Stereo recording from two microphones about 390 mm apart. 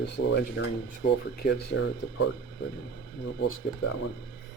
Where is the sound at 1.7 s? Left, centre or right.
Left.